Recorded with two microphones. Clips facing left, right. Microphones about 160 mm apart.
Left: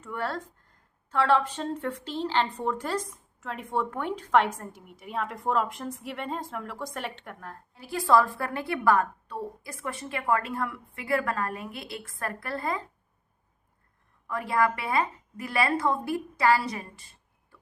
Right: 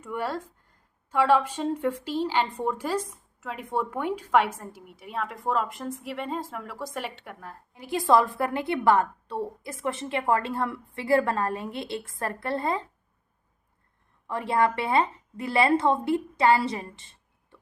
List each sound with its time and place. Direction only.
0.0 s a woman's voice: 10° right (ahead or behind)
14.3 s a woman's voice: 25° right (ahead or behind)